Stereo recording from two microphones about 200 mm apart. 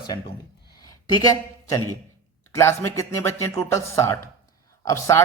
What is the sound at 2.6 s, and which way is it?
Speech, 15° left (ahead or behind).